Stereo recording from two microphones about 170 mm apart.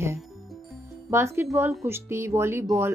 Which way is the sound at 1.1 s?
15° right (ahead or behind).